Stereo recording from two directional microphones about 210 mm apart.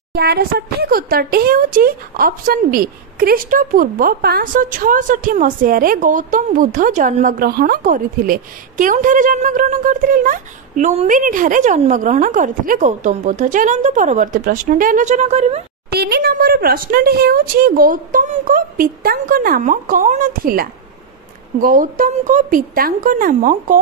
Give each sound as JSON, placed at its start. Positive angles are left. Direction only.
{"t": 0.1, "sound": "speech", "side_deg": -50}
{"t": 15.9, "sound": "speech", "side_deg": -50}